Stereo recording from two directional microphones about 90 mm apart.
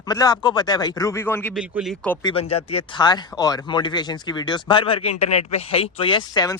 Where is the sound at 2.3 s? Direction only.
90° left.